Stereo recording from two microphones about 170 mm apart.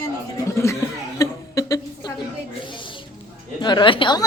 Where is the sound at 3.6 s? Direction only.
25° left (ahead or behind).